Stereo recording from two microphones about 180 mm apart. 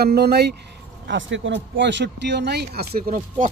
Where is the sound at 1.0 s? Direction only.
90° right; by 3.4 s 55° right (ahead or behind).